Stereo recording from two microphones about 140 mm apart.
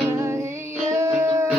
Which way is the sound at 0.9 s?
20° right (ahead or behind).